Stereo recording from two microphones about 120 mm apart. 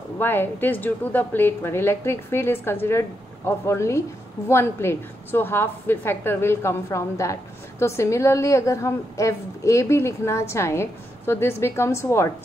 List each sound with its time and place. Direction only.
0.2 s a woman's voice: 15° left (ahead or behind)